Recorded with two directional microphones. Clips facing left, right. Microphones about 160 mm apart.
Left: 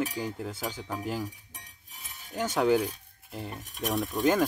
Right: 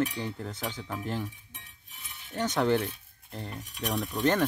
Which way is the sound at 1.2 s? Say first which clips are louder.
Left 2 dB; 40° left (ahead or behind).